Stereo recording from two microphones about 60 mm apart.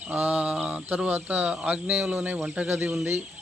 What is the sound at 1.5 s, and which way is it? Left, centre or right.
Speech, centre.